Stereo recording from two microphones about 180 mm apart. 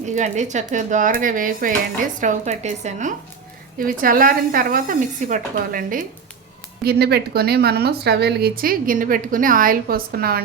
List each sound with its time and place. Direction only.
0.0 s a woman's voice: 40° right (ahead or behind)
3.8 s a woman's voice: 50° right (ahead or behind)
6.8 s a woman's voice: 60° right (ahead or behind)